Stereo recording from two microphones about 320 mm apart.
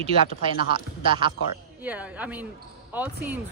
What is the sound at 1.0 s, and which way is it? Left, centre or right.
Speech, centre.